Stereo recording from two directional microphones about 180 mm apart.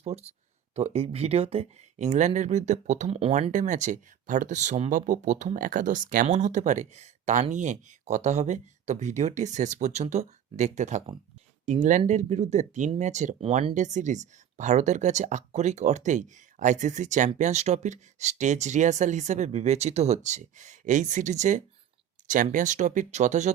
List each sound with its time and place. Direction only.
0.0 s speech: 35° right (ahead or behind)